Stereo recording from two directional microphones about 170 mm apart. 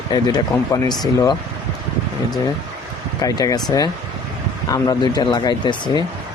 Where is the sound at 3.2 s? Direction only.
20° left (ahead or behind).